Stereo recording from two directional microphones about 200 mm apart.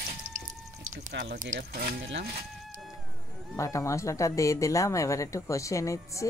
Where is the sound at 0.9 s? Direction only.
40° right (ahead or behind).